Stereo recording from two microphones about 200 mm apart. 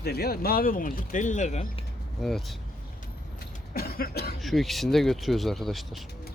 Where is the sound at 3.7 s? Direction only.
50° left (ahead or behind).